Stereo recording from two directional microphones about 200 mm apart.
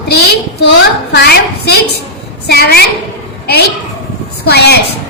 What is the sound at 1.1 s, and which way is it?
A woman's voice, 55° left (ahead or behind).